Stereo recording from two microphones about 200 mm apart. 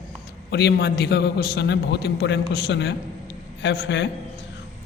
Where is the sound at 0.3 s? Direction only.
55° left (ahead or behind).